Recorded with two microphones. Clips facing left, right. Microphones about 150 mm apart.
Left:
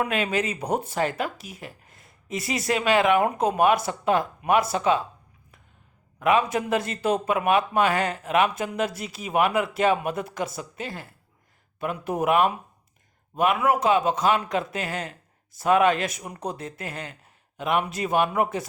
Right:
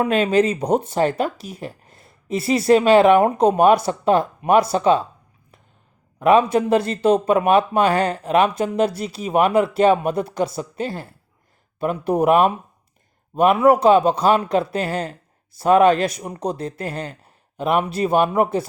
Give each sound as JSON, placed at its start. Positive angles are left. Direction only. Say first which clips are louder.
{"t": 0.0, "sound": "speech", "louder": "right 8 dB", "side_deg": -30}
{"t": 6.1, "sound": "speech", "louder": "right 7 dB", "side_deg": -30}